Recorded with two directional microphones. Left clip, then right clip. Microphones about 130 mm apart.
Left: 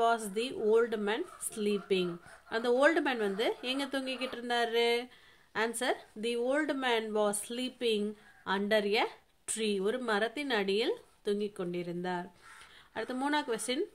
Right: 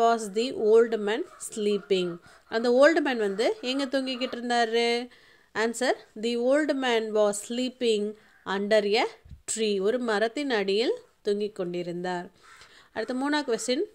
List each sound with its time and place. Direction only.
0.0 s speech: 35° right (ahead or behind)